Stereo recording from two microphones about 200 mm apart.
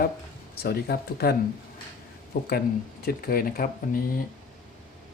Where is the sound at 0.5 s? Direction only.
50° left (ahead or behind).